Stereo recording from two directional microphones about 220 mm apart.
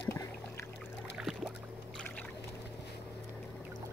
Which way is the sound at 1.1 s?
5° right (ahead or behind).